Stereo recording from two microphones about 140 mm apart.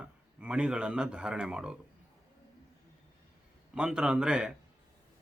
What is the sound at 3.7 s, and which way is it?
Speech, 5° right (ahead or behind).